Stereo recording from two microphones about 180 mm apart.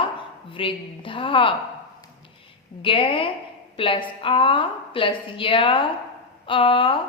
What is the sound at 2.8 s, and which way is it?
A woman's voice, 30° left (ahead or behind).